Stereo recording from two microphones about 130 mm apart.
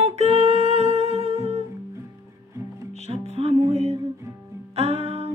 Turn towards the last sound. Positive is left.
turn(degrees=-50)  # may be behind; listen again after turning